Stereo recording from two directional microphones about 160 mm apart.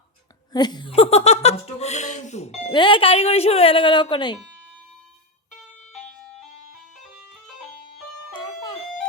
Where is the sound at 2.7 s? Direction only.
30° left (ahead or behind).